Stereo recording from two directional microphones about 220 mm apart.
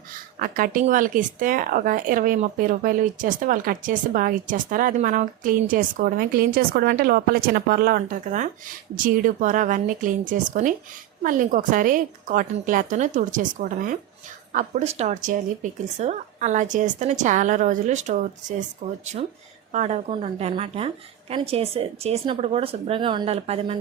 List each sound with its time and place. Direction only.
0.3 s speech: 40° right (ahead or behind)
14.5 s a woman's voice: 35° right (ahead or behind)